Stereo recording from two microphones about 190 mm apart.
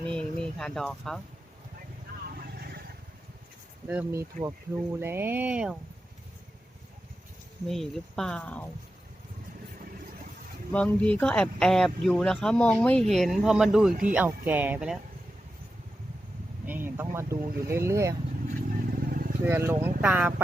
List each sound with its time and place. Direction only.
0.1 s speech: 5° left (ahead or behind)
2.6 s vehicle: 55° right (ahead or behind)
3.8 s speech: 10° right (ahead or behind)
7.7 s speech: centre (ahead or behind)
10.7 s speech: 5° left (ahead or behind)
16.6 s speech: 10° right (ahead or behind)
19.0 s vehicle: 50° right (ahead or behind)
19.5 s speech: 15° right (ahead or behind)